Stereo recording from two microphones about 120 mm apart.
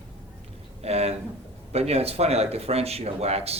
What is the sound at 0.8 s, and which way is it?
Speech, 60° right (ahead or behind).